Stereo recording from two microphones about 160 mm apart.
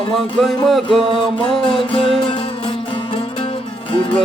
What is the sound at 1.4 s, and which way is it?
Music, 35° left (ahead or behind).